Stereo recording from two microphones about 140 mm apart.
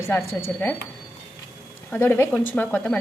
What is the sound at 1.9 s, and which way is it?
A woman's voice, 15° left (ahead or behind).